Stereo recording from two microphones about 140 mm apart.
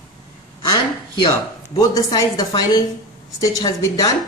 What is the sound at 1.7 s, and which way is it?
A woman's voice, 25° left (ahead or behind).